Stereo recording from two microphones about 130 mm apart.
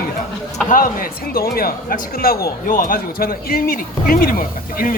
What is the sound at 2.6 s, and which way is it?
Speech, 90° left.